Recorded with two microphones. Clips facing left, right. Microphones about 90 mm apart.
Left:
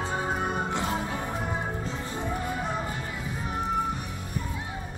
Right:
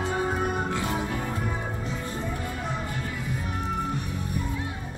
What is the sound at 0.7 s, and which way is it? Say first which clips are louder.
Music: right 1 dB; 25° left (ahead or behind).